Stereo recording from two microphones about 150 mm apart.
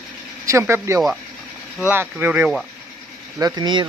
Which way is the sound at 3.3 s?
25° right (ahead or behind).